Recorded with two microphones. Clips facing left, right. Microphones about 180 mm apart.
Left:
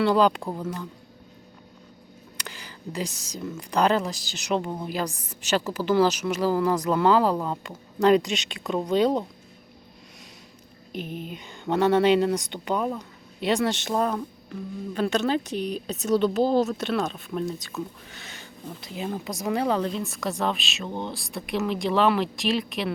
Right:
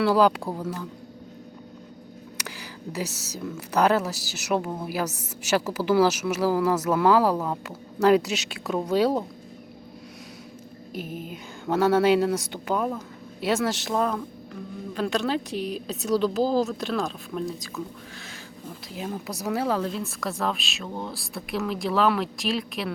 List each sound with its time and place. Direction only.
0.0 s speech: 5° right (ahead or behind)
2.4 s a sound: 10° right (ahead or behind)
3.7 s a woman's voice: 5° right (ahead or behind)
10.9 s a woman's voice: 5° right (ahead or behind)
14.9 s a woman's voice: centre (ahead or behind)